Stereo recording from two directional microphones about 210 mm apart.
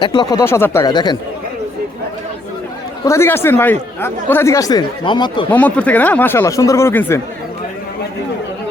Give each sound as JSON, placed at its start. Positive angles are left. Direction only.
{"t": 0.0, "sound": "speech", "side_deg": 20}
{"t": 3.0, "sound": "speech", "side_deg": 15}
{"t": 5.5, "sound": "speech", "side_deg": 5}